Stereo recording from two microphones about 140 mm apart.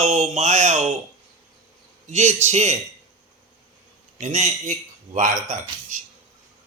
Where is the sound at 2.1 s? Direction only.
55° right (ahead or behind).